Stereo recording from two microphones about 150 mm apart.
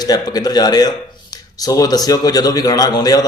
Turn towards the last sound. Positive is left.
turn(degrees=25)  # may be behind; listen again after turning